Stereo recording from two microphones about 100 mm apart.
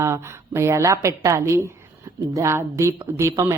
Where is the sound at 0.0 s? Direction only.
30° right (ahead or behind).